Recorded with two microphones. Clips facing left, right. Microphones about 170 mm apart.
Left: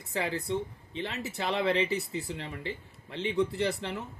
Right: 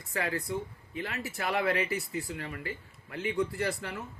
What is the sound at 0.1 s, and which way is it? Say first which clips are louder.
Speech: left 2 dB; 20° left (ahead or behind).